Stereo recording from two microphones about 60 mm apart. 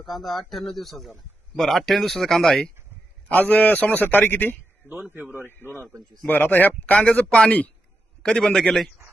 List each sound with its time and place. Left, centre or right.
0.0 s a man's voice: centre
3.2 s a man's voice: left
5.2 s speech: right
6.2 s a man's voice: left; by 8.9 s centre